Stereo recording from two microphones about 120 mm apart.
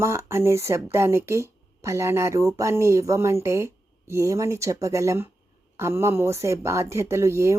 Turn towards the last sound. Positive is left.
turn(degrees=-25)  # may be behind; listen again after turning